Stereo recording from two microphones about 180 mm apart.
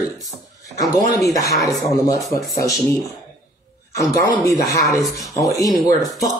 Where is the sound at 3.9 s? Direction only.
20° left (ahead or behind).